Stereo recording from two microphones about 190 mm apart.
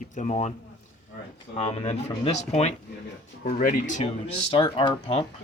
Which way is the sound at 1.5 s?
35° left (ahead or behind).